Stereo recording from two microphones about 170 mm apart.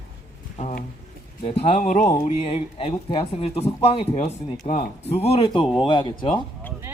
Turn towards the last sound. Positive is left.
turn(degrees=30)  # may be behind; listen again after turning